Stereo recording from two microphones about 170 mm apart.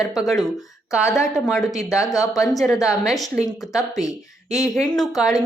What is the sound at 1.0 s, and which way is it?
A woman's voice, 15° left (ahead or behind).